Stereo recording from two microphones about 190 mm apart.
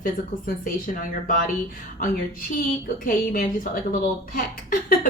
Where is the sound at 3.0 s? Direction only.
50° left (ahead or behind).